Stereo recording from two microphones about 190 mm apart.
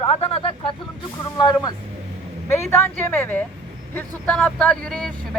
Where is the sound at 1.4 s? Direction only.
20° left (ahead or behind).